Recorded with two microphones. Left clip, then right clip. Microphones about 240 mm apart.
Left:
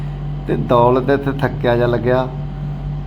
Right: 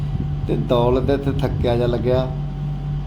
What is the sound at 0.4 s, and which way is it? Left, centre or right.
A man's voice, centre.